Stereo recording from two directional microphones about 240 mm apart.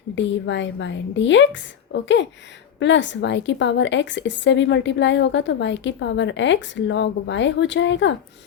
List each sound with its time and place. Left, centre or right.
0.2 s a woman's voice: left